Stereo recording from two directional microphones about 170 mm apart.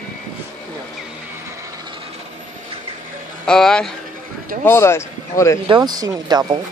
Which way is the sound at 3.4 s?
5° left (ahead or behind).